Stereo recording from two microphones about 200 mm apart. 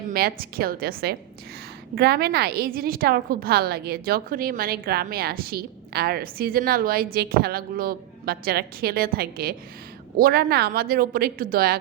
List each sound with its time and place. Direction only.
0.1 s a woman's voice: 50° right (ahead or behind)